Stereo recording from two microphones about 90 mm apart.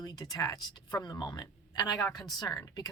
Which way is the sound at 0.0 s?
45° left (ahead or behind).